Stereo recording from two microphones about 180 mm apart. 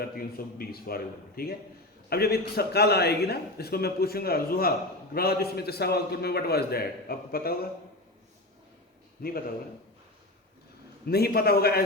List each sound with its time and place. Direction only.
0.0 s a man's voice: 55° left (ahead or behind)
9.2 s a man's voice: 60° left (ahead or behind)
11.0 s a man's voice: 60° left (ahead or behind)